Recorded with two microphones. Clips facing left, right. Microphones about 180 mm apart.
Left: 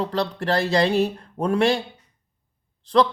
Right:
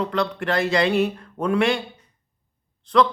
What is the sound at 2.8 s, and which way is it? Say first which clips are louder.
Speech: even; 35° left (ahead or behind).